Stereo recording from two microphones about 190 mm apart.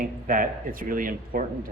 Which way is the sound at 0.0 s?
45° right (ahead or behind).